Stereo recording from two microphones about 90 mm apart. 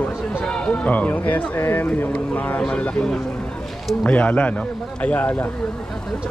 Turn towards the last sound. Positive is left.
turn(degrees=20)  # may be behind; listen again after turning